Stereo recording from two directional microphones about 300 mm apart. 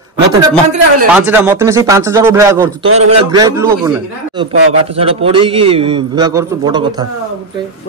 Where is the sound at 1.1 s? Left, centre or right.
Centre.